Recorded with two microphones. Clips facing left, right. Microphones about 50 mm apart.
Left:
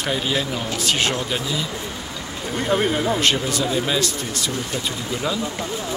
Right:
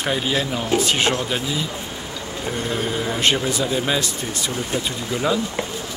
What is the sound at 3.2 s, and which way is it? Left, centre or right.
Speech, centre.